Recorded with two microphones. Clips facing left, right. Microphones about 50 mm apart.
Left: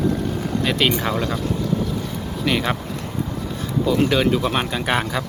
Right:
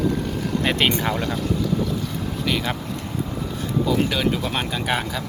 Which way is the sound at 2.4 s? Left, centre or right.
Centre.